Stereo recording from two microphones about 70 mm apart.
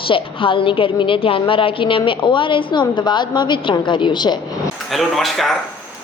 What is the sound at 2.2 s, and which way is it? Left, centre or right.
A woman's voice, left.